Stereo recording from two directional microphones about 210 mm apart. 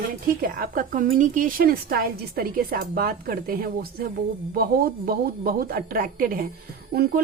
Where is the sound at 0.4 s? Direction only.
45° right (ahead or behind).